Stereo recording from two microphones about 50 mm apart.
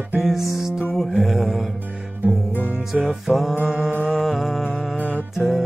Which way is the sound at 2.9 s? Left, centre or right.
Centre.